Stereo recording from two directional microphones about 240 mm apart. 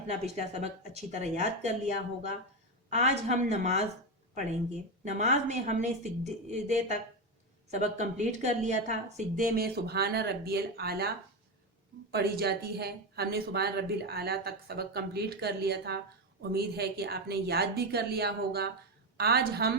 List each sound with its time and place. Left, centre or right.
0.1 s a woman's voice: right
2.9 s a woman's voice: right
5.0 s a woman's voice: right
12.1 s speech: right